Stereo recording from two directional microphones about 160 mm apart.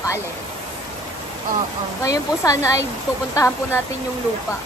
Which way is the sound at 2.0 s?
20° left (ahead or behind).